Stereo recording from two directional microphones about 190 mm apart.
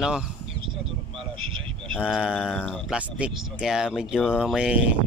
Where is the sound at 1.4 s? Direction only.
25° right (ahead or behind).